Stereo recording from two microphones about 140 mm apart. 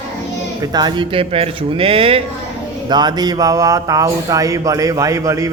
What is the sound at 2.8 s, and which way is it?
A man's voice, 30° right (ahead or behind).